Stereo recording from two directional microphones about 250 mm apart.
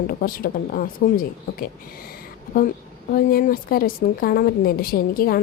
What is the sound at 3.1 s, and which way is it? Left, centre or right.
A woman's voice, left.